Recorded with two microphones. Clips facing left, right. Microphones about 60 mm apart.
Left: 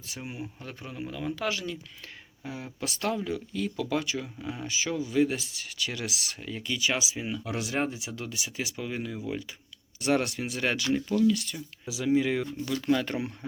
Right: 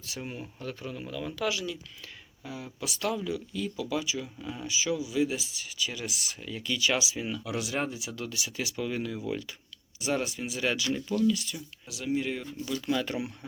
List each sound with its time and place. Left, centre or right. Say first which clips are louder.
0.2 s speech: even; centre
0.6 s speech: right 1 dB; left
4.4 s speech: left 2 dB; left
4.6 s speech: right 1 dB; left
6.4 s speech: right 1 dB; left
7.4 s speech: left 3 dB; left
10.0 s speech: left 4 dB; left
12.4 s speech: left 3 dB; left